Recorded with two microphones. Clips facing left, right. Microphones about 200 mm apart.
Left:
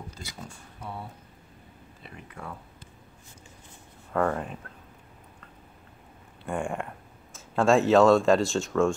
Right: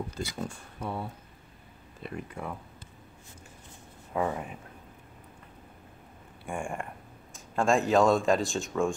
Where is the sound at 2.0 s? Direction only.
50° right (ahead or behind).